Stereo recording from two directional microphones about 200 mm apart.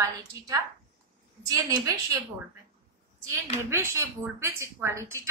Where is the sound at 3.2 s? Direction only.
15° right (ahead or behind).